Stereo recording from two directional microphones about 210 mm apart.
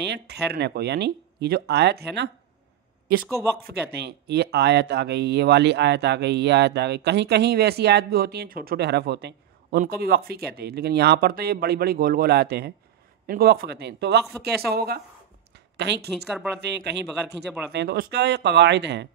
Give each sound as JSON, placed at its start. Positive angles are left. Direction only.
{"t": 0.0, "sound": "speech", "side_deg": -50}
{"t": 3.3, "sound": "speech", "side_deg": -15}
{"t": 3.6, "sound": "speech", "side_deg": -50}
{"t": 15.5, "sound": "a sound", "side_deg": -55}
{"t": 16.5, "sound": "speech", "side_deg": -55}